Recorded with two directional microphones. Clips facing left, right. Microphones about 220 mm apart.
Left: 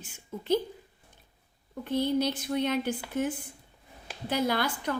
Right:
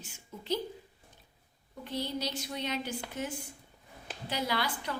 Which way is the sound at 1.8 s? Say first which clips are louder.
Left 9 dB; 55° left (ahead or behind).